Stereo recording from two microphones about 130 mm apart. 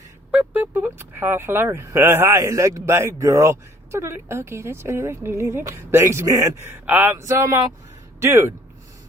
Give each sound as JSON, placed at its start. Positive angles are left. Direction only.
{"t": 0.3, "sound": "speech", "side_deg": -10}